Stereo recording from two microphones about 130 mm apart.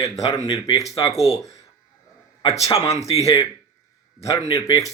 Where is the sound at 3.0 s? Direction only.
50° left (ahead or behind).